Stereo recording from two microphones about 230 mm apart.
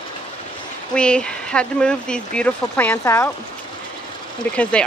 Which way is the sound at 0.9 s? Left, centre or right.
Centre.